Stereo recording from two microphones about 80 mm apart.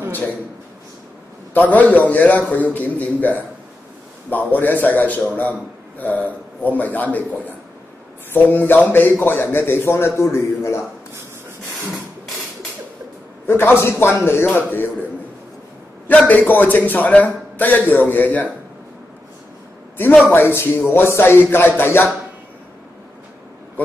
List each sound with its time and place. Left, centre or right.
1.6 s a man's voice: centre; by 10.8 s left
13.5 s a man's voice: left
16.3 s a man's voice: left
20.2 s a man's voice: left